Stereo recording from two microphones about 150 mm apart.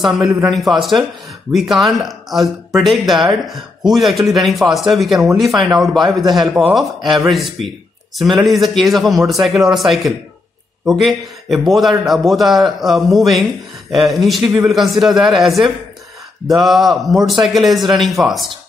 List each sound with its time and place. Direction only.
0.0 s speech: centre (ahead or behind)